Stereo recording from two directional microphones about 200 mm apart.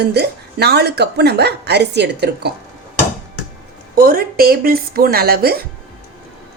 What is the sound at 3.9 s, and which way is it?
Speech, 45° right (ahead or behind).